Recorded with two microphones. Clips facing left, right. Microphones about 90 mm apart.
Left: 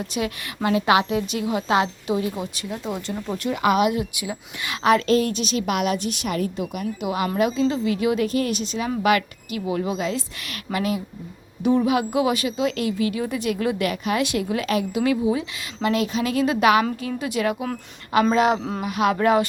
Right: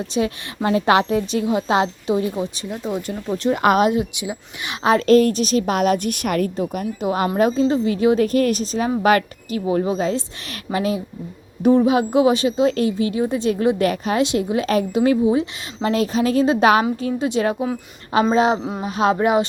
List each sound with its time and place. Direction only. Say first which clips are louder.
0.1 s a woman's voice: right 5 dB; 30° right (ahead or behind)
3.5 s a woman's voice: right 3 dB; 45° right (ahead or behind)
3.8 s a woman's voice: right 4 dB; 25° right (ahead or behind)
5.0 s a woman's voice: right 6 dB; 45° right (ahead or behind)
6.6 s a woman's voice: right 4 dB; 40° right (ahead or behind); by 19.5 s 20° right (ahead or behind)